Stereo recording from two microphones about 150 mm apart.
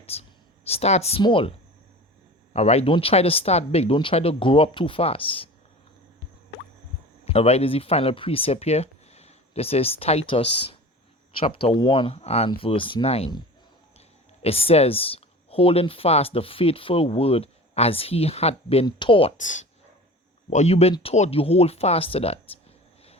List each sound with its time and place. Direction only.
0.0 s a sound: 45° left (ahead or behind)
1.2 s speech: 35° left (ahead or behind)
7.3 s speech: 45° left (ahead or behind)
14.4 s speech: 40° left (ahead or behind)
19.4 s speech: 55° left (ahead or behind); by 22.4 s 40° left (ahead or behind)